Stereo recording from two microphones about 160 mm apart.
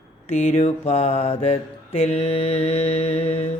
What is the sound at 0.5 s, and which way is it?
Mantra, 40° left (ahead or behind).